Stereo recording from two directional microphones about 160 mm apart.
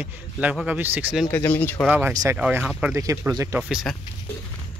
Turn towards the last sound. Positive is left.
turn(degrees=0)  # may be behind; listen again after turning